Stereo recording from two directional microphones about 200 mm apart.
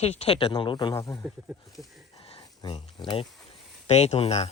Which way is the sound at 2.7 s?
25° left (ahead or behind).